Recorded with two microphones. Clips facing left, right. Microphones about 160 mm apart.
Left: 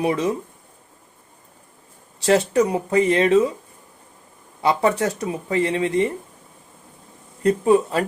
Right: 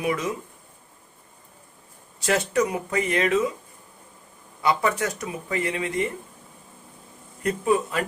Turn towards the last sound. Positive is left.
turn(degrees=30)  # may be behind; listen again after turning